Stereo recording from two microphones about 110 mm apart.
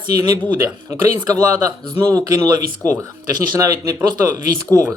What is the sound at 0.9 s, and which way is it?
Speech, 35° right (ahead or behind).